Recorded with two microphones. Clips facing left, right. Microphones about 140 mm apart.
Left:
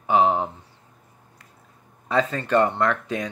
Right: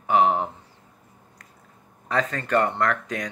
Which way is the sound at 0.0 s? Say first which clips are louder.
Left 1 dB; 20° left (ahead or behind).